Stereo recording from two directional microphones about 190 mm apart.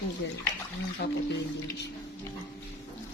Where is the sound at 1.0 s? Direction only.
55° left (ahead or behind).